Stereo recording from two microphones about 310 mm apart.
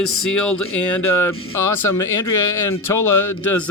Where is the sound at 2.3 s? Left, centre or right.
Left.